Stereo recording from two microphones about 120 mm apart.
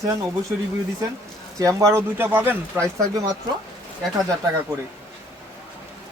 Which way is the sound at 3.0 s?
30° right (ahead or behind).